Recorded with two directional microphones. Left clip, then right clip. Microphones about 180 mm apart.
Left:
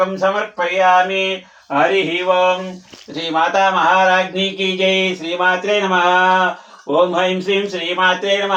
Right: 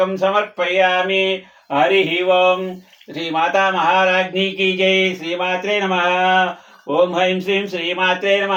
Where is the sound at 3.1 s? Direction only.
10° right (ahead or behind).